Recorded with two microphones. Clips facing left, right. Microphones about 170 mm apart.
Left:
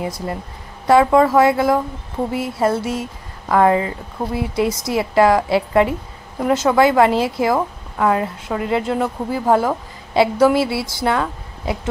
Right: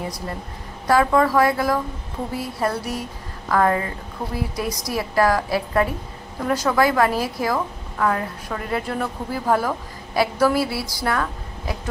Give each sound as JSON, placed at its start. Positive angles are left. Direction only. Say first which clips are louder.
{"t": 0.8, "sound": "a woman's voice", "louder": "left 5 dB", "side_deg": 25}